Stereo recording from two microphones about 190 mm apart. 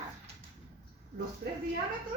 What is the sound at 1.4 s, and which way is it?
Speech, 60° right (ahead or behind).